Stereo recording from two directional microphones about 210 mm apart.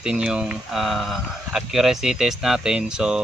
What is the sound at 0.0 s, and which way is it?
Speech, 5° right (ahead or behind).